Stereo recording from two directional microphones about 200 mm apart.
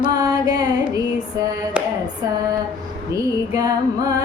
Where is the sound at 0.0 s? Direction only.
20° right (ahead or behind).